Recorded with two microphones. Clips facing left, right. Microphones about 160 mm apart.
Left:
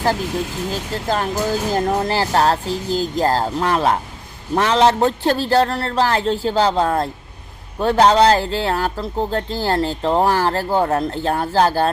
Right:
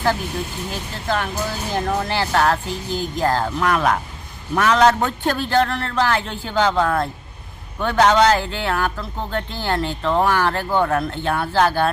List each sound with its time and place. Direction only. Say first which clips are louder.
1.0 s speech: left 2 dB; 40° left (ahead or behind)